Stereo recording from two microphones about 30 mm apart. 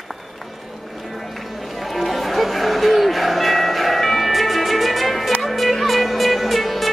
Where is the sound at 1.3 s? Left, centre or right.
Centre.